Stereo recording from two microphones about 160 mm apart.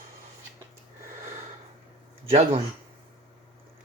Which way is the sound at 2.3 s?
40° right (ahead or behind).